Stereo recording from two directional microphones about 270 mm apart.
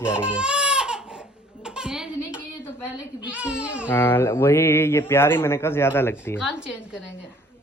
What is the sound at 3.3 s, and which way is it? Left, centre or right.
Speech, centre.